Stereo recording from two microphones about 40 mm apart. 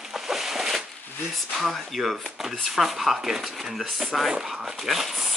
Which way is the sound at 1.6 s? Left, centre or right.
Centre.